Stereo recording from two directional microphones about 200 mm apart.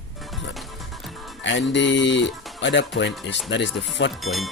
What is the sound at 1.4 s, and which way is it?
Music, 65° left (ahead or behind).